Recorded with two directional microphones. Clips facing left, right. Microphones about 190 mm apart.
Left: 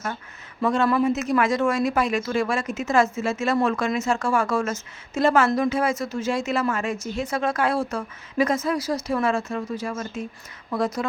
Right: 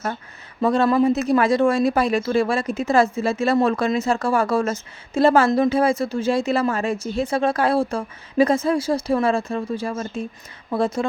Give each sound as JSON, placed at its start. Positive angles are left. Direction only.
{"t": 0.6, "sound": "speech", "side_deg": -35}